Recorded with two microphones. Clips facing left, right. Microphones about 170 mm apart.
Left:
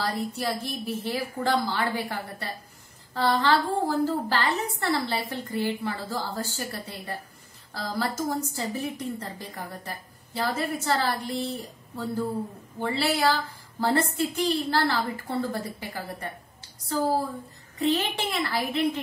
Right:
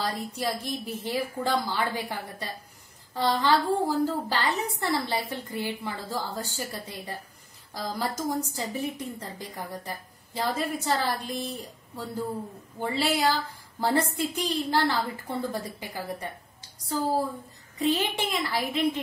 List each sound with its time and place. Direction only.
0.0 s a woman's voice: 15° right (ahead or behind)
12.7 s a woman's voice: 15° right (ahead or behind)
17.7 s a woman's voice: 10° right (ahead or behind)